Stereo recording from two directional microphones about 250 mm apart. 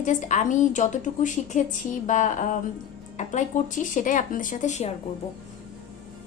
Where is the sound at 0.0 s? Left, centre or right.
Left.